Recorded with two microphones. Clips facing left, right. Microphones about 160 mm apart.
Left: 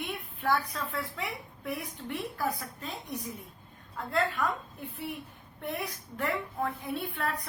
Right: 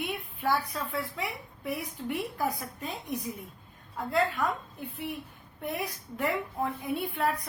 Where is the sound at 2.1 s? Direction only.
15° right (ahead or behind).